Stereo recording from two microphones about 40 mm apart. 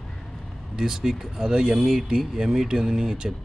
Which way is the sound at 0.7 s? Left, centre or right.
Centre.